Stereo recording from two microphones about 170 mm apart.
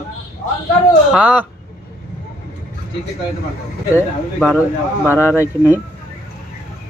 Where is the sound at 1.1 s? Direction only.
10° right (ahead or behind).